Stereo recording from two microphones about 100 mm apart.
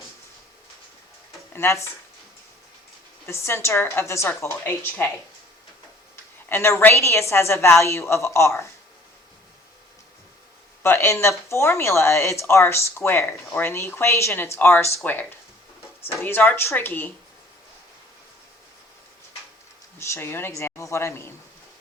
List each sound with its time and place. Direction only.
1.5 s speech: 25° left (ahead or behind)
3.2 s speech: 25° left (ahead or behind)
6.5 s speech: 25° left (ahead or behind)
10.8 s speech: 25° left (ahead or behind)
20.0 s speech: 25° left (ahead or behind)